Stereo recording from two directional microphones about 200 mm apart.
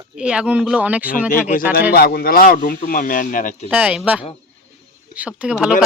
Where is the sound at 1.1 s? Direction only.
40° left (ahead or behind).